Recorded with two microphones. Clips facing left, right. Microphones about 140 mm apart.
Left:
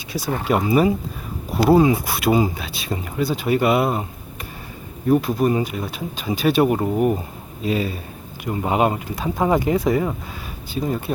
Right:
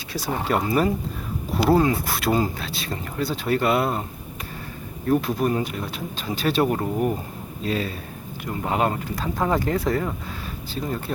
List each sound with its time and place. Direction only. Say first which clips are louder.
0.1 s speech: left 3 dB; 15° left (ahead or behind)
5.0 s speech: left 4 dB; 5° left (ahead or behind)